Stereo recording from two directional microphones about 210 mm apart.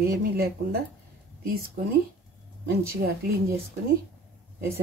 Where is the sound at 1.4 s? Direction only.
45° right (ahead or behind).